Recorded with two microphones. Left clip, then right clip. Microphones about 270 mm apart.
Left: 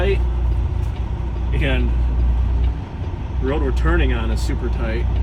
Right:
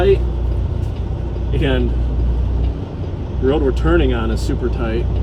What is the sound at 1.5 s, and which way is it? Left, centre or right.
Speech, centre.